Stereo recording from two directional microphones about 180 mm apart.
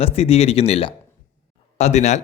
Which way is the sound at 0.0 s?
35° left (ahead or behind).